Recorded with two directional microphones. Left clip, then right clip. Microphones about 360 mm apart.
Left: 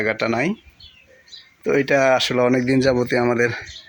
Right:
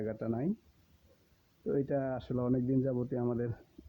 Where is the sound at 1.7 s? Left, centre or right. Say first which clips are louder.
Left 18 dB; right.